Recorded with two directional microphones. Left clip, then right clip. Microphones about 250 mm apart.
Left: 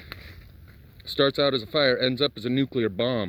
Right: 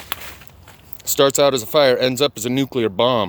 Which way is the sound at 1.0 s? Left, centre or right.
Right.